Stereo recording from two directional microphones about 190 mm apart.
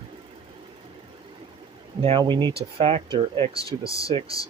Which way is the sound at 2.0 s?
25° right (ahead or behind).